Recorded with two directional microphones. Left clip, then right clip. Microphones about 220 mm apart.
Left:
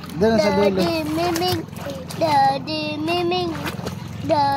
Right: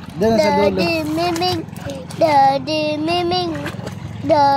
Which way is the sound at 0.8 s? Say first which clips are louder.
Right 3 dB; 25° right (ahead or behind).